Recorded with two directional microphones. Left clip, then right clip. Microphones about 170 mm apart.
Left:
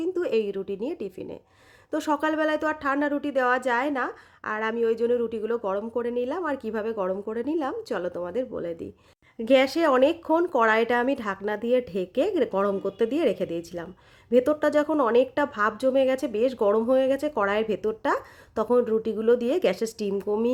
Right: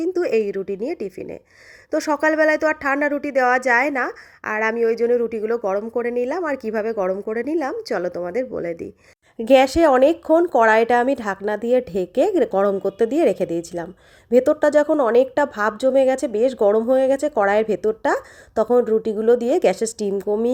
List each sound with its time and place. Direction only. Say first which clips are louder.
0.9 s speech: right 5 dB; 5° right (ahead or behind)
1.9 s a man's voice: right 6 dB; 20° right (ahead or behind)